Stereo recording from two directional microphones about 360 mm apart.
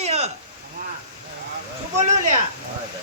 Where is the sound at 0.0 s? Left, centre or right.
Centre.